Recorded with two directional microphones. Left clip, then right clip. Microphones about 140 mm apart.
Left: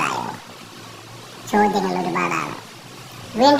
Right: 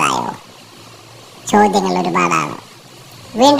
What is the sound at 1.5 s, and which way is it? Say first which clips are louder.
A child's voice: right 6 dB; 30° right (ahead or behind).